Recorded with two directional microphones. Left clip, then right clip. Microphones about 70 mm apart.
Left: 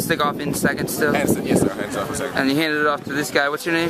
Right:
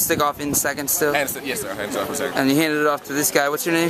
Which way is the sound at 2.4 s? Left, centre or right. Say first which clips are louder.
Even; right.